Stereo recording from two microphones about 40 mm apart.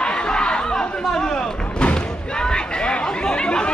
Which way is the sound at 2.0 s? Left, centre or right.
Left.